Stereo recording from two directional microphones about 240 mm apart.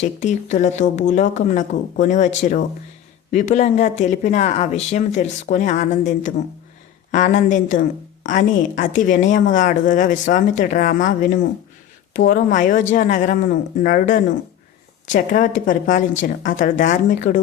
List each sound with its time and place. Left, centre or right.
0.0 s a woman's voice: left